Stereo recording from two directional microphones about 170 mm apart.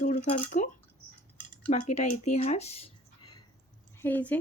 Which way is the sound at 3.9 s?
10° left (ahead or behind).